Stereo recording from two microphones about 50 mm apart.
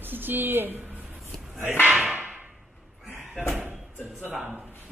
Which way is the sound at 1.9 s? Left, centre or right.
Centre.